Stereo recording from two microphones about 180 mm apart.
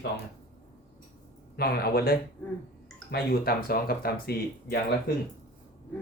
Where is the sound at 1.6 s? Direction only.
60° left (ahead or behind).